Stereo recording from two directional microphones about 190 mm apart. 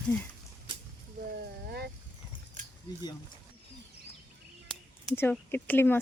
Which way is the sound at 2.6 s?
40° right (ahead or behind).